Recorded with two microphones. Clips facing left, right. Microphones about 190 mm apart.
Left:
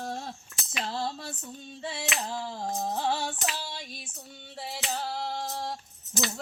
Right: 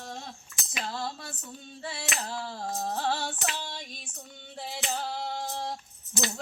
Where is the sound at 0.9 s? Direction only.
30° left (ahead or behind).